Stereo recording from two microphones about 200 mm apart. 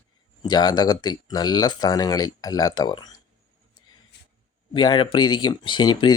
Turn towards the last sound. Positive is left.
turn(degrees=20)  # may be behind; listen again after turning